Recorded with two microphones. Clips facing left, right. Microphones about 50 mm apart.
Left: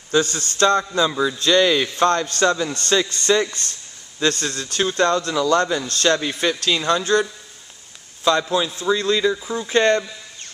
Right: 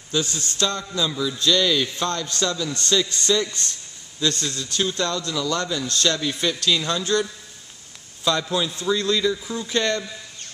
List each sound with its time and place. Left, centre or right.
0.1 s a man's voice: left
4.5 s a man's voice: left